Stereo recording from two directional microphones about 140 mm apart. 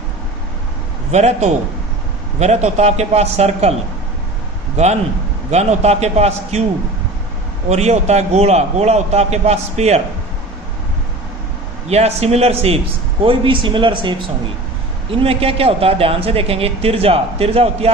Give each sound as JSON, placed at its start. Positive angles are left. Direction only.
{"t": 1.1, "sound": "a man's voice", "side_deg": -55}
{"t": 4.8, "sound": "a man's voice", "side_deg": -55}
{"t": 7.7, "sound": "a man's voice", "side_deg": -50}
{"t": 11.9, "sound": "a man's voice", "side_deg": -50}